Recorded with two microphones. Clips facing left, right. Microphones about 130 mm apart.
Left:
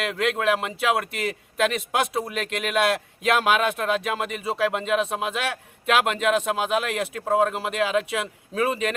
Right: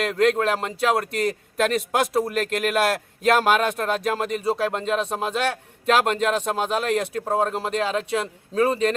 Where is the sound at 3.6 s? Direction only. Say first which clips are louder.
Right 1 dB; 40° right (ahead or behind).